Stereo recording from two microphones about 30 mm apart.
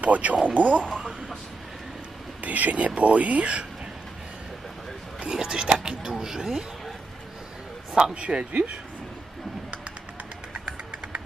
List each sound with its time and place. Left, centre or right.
0.0 s speech: right
2.4 s speech: right
5.2 s speech: right
6.1 s speech: centre
8.1 s speech: right